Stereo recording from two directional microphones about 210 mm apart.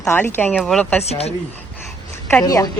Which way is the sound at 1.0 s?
30° left (ahead or behind).